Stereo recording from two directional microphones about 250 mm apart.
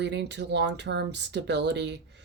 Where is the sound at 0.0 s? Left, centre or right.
Right.